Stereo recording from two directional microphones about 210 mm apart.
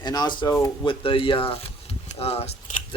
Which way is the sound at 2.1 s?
30° left (ahead or behind).